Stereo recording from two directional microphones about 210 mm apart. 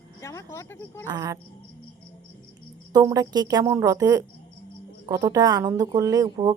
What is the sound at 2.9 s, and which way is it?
Speech, 15° right (ahead or behind).